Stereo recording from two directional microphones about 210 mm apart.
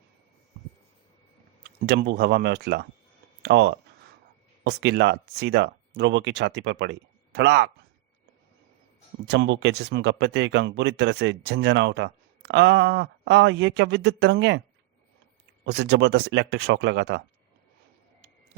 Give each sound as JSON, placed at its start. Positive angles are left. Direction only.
{"t": 1.6, "sound": "speech", "side_deg": -50}
{"t": 9.2, "sound": "speech", "side_deg": -55}
{"t": 15.6, "sound": "speech", "side_deg": -55}